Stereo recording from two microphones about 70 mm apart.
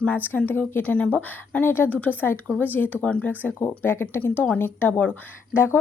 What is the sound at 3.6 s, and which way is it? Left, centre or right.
A woman's voice, left.